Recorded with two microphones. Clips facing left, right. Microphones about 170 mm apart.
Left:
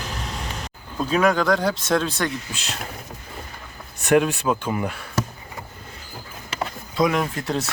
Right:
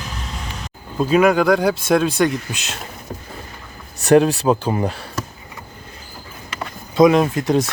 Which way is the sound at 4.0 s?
35° right (ahead or behind).